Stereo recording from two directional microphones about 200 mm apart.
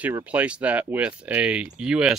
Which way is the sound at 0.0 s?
5° right (ahead or behind).